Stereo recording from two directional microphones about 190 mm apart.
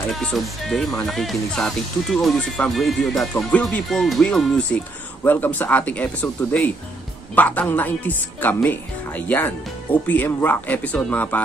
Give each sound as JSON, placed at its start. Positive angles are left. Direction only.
{"t": 0.1, "sound": "speech", "side_deg": 0}